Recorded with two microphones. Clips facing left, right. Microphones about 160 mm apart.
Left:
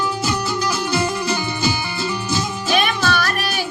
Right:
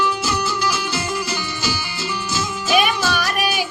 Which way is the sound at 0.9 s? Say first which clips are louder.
Left 4 dB; 55° left (ahead or behind).